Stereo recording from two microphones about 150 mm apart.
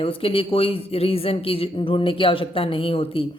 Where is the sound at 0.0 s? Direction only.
40° left (ahead or behind).